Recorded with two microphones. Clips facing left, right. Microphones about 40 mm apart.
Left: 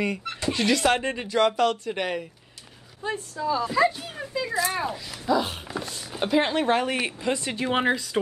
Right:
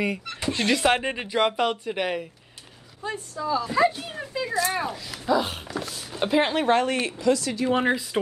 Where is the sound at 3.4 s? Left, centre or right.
Centre.